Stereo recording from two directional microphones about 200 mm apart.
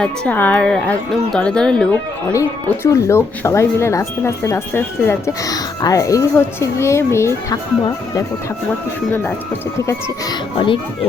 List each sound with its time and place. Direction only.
0.0 s a woman's voice: 10° left (ahead or behind)
9.8 s speech: 20° left (ahead or behind)